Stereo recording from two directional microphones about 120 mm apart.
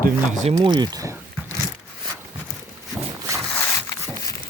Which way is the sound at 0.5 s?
35° right (ahead or behind).